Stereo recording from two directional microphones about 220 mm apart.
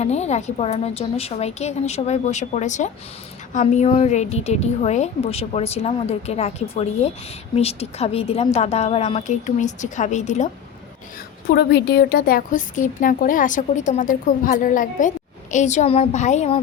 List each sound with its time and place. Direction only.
0.0 s a woman's voice: 30° left (ahead or behind)
11.4 s a woman's voice: 50° left (ahead or behind); by 16.6 s 30° left (ahead or behind)